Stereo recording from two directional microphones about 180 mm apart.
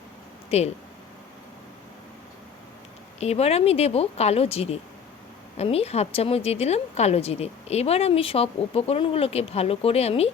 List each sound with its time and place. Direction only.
0.5 s a woman's voice: 35° left (ahead or behind)
3.2 s a woman's voice: 35° left (ahead or behind)